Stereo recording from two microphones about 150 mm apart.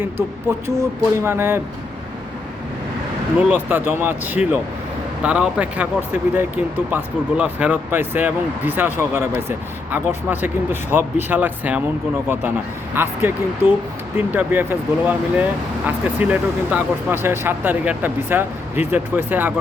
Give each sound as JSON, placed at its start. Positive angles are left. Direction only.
{"t": 0.8, "sound": "speech", "side_deg": -15}
{"t": 3.4, "sound": "speech", "side_deg": -10}
{"t": 12.9, "sound": "speech", "side_deg": -15}